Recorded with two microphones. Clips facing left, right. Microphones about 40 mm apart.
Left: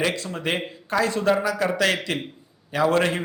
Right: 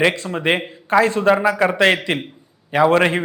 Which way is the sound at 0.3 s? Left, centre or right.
Right.